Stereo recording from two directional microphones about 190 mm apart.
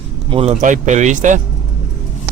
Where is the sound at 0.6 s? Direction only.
40° right (ahead or behind).